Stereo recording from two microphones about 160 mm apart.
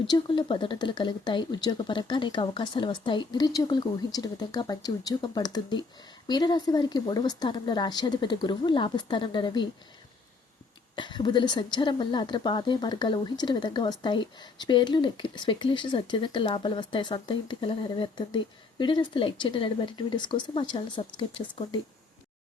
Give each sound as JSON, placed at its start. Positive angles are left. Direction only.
{"t": 0.1, "sound": "a woman's voice", "side_deg": 30}
{"t": 10.9, "sound": "a woman's voice", "side_deg": 30}